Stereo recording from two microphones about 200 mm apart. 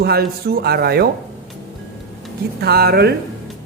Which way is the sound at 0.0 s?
50° right (ahead or behind).